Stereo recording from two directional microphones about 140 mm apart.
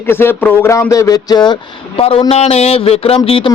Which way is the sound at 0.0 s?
15° left (ahead or behind).